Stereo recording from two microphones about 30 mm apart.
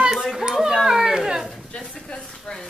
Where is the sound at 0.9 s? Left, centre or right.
Centre.